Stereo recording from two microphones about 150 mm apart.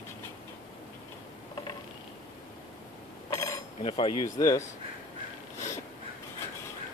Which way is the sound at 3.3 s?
20° left (ahead or behind).